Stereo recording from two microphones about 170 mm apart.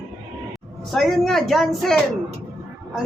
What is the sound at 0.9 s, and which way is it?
Speech, centre (ahead or behind).